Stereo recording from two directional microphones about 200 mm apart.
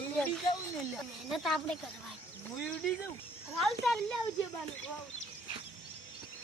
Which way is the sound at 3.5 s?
Centre (ahead or behind).